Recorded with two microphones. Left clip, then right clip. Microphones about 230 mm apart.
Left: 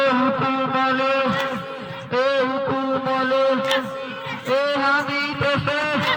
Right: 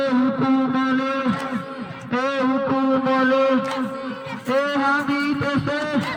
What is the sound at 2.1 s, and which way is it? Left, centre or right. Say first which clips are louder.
Music: left 2 dB; left.